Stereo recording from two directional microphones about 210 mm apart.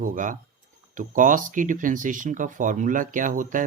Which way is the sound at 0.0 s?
40° right (ahead or behind).